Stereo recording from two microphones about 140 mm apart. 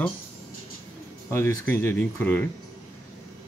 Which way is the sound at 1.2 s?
15° left (ahead or behind).